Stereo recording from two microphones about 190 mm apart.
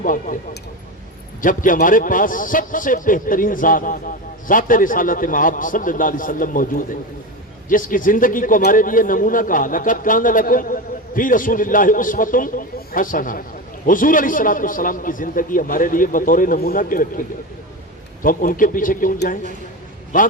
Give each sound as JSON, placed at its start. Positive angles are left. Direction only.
{"t": 0.0, "sound": "a man's voice", "side_deg": 45}
{"t": 1.4, "sound": "a man's voice", "side_deg": 45}